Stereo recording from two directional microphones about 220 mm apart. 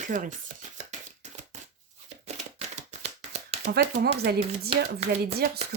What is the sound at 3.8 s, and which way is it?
Speech, 45° right (ahead or behind).